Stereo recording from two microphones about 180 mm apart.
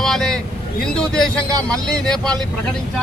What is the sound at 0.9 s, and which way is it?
Speech, 5° left (ahead or behind).